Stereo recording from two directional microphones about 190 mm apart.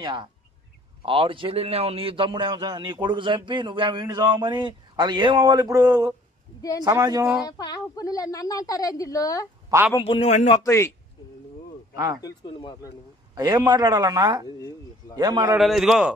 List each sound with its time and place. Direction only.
0.0 s a man's voice: 25° right (ahead or behind)
7.4 s a woman's voice: 20° left (ahead or behind)
9.9 s a man's voice: 30° left (ahead or behind)
10.5 s speech: 15° left (ahead or behind)
11.9 s speech: 20° right (ahead or behind)
12.2 s a woman's voice: 25° left (ahead or behind)
13.3 s a man's voice: 20° right (ahead or behind)
15.5 s a man's voice: centre (ahead or behind)